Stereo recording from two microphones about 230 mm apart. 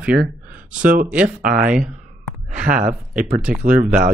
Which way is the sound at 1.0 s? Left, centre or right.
Centre.